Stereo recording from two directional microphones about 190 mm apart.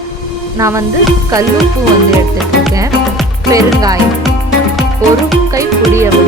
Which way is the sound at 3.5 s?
20° right (ahead or behind).